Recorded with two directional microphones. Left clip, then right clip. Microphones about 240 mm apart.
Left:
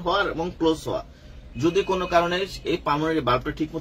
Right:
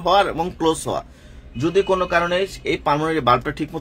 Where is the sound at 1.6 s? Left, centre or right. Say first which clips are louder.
Right 4 dB; right.